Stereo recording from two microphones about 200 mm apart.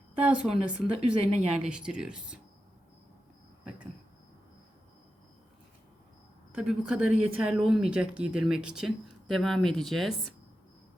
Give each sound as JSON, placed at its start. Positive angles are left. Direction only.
{"t": 0.5, "sound": "a woman's voice", "side_deg": -30}
{"t": 1.6, "sound": "speech", "side_deg": -5}
{"t": 6.6, "sound": "speech", "side_deg": -5}